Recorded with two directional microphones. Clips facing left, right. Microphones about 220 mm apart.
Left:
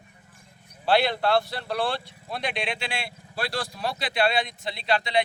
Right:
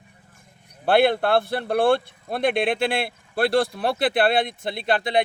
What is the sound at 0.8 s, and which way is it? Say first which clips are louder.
Speech: right 5 dB; 55° right (ahead or behind).